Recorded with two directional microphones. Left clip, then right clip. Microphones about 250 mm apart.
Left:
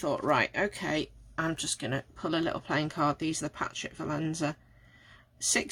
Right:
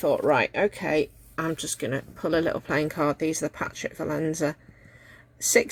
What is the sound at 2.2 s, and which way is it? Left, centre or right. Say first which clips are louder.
Speech: right 7 dB; left.